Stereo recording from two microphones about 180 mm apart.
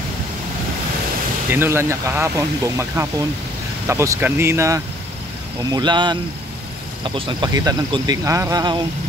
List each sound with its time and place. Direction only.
1.5 s speech: 10° right (ahead or behind)
7.2 s speech: 25° right (ahead or behind)